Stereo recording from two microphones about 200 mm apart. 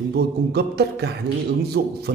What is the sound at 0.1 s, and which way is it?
A man's voice, 55° right (ahead or behind).